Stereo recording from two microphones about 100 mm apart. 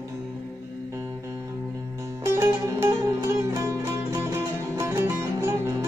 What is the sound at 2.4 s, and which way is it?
Music, 30° right (ahead or behind).